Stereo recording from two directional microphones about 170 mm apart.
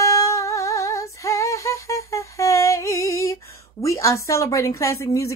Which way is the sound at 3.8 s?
20° left (ahead or behind).